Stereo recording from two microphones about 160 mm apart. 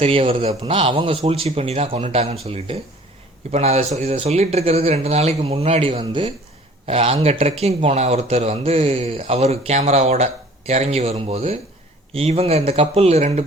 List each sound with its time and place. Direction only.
0.0 s a man's voice: 35° right (ahead or behind)